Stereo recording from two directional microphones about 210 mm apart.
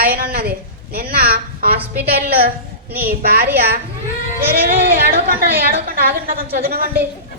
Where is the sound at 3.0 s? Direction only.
45° right (ahead or behind).